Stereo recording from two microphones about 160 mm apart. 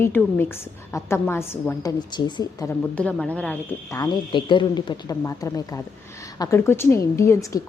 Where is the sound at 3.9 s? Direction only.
25° left (ahead or behind).